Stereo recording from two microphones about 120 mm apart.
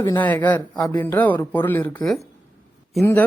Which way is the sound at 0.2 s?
15° left (ahead or behind).